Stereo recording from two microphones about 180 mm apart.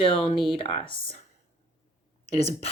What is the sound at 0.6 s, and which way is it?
Speech, 30° left (ahead or behind).